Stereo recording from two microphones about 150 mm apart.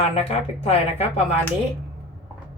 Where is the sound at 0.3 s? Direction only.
40° left (ahead or behind).